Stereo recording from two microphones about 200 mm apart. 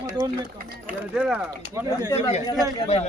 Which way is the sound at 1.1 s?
5° right (ahead or behind).